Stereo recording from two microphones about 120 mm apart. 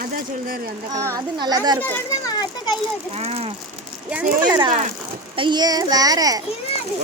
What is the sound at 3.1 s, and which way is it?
Speech, 60° right (ahead or behind).